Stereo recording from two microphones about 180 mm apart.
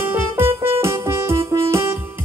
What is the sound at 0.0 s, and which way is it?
Music, 15° right (ahead or behind).